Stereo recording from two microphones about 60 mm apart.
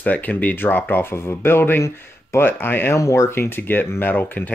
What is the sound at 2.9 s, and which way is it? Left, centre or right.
Speech, left.